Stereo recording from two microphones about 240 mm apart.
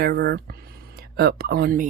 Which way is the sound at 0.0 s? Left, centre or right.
Right.